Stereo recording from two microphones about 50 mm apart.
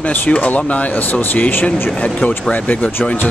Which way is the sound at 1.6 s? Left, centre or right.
Left.